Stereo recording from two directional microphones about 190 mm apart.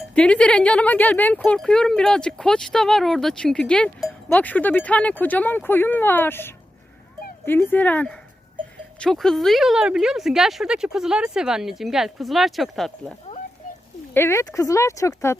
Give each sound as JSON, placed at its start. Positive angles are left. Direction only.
{"t": 0.1, "sound": "speech", "side_deg": 5}
{"t": 14.1, "sound": "speech", "side_deg": 10}